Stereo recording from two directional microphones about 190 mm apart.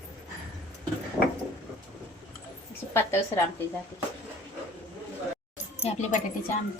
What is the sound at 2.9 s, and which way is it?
Speech, 15° left (ahead or behind).